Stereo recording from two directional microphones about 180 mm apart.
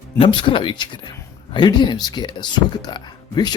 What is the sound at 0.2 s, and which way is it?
Speech, 25° left (ahead or behind).